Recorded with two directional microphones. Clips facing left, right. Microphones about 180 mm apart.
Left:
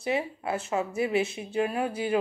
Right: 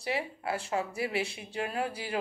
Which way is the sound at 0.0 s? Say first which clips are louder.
Left 4 dB; 20° left (ahead or behind).